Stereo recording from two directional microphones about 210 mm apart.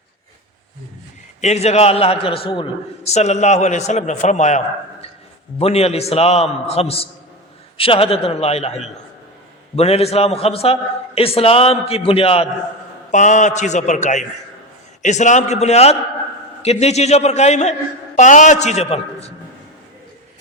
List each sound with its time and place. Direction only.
1.4 s a man's voice: 30° left (ahead or behind)